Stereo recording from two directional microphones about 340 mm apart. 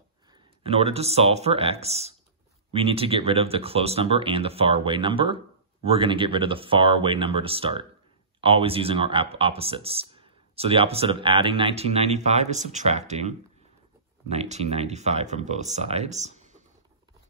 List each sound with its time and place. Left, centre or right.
0.3 s speech: centre